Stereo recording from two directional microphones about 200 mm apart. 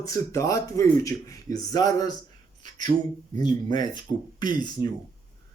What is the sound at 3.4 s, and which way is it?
Speech, 20° left (ahead or behind).